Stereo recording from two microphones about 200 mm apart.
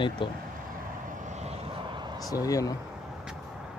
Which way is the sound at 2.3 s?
15° left (ahead or behind).